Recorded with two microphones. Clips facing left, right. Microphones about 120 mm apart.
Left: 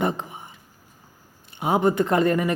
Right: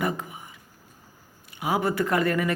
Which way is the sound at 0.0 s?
25° left (ahead or behind).